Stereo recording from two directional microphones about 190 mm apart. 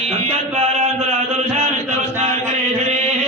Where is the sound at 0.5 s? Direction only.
35° right (ahead or behind).